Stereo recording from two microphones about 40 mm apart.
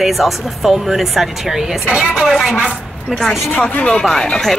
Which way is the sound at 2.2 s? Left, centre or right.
Centre.